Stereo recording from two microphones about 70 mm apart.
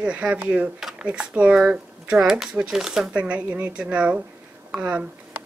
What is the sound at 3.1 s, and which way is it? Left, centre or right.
Speech, centre.